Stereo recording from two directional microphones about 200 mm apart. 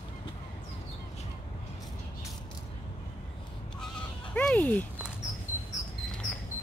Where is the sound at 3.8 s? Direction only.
5° left (ahead or behind).